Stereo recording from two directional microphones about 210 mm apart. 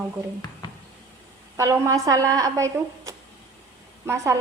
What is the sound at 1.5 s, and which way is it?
A woman's voice, 15° right (ahead or behind).